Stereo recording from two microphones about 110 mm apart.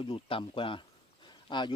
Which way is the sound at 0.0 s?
55° left (ahead or behind).